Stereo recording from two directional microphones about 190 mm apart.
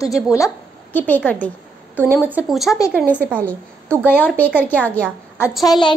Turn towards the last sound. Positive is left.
turn(degrees=25)  # may be behind; listen again after turning